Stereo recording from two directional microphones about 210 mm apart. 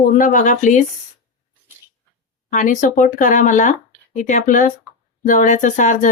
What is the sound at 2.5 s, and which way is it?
Speech, 35° left (ahead or behind).